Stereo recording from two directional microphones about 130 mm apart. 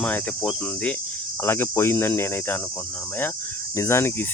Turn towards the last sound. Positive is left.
turn(degrees=20)  # may be behind; listen again after turning